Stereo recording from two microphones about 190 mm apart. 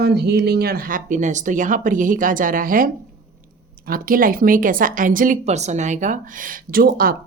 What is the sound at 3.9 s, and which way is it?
A woman's voice, 50° right (ahead or behind).